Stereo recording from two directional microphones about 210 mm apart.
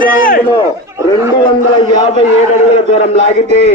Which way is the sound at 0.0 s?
40° left (ahead or behind).